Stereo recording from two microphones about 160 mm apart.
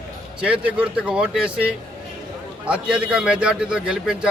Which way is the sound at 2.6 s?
5° right (ahead or behind).